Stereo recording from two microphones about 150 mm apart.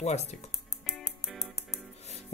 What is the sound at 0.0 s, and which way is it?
Speech, 45° left (ahead or behind).